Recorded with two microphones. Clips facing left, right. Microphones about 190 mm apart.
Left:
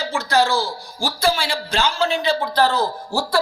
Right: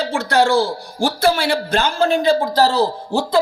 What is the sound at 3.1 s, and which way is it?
Speech, 20° right (ahead or behind).